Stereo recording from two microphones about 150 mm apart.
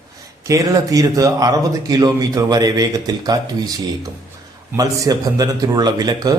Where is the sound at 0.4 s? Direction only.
20° right (ahead or behind).